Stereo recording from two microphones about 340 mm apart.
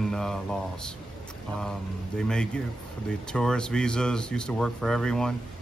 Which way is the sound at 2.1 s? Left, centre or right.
Centre.